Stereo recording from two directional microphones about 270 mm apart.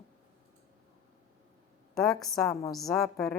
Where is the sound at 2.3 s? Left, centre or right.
Centre.